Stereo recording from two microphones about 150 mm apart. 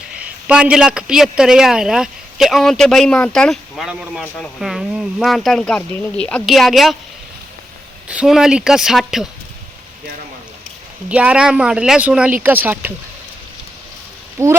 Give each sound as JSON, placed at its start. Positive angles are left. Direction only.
{"t": 0.2, "sound": "a man's voice", "side_deg": -10}
{"t": 8.0, "sound": "a man's voice", "side_deg": -5}
{"t": 11.1, "sound": "speech", "side_deg": -10}
{"t": 14.3, "sound": "speech", "side_deg": -20}